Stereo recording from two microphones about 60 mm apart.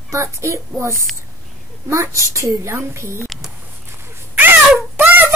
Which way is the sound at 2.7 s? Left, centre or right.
Right.